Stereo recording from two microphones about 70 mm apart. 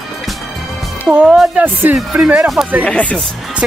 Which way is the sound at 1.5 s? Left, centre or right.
Right.